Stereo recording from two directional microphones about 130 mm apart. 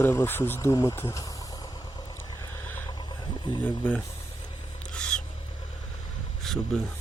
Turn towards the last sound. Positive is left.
turn(degrees=5)  # may be behind; listen again after turning